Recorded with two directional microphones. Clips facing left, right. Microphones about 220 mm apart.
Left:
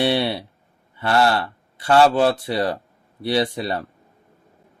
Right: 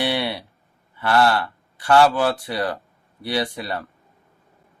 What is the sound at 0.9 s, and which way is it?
Speech, 25° left (ahead or behind).